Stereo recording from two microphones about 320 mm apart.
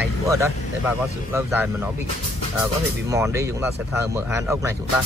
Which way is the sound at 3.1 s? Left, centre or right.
Centre.